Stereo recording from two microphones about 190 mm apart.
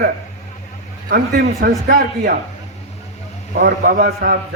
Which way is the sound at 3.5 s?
50° right (ahead or behind).